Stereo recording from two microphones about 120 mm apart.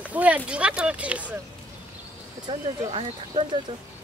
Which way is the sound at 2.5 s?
50° right (ahead or behind).